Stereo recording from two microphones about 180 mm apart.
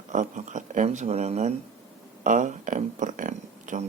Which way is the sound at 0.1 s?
45° right (ahead or behind).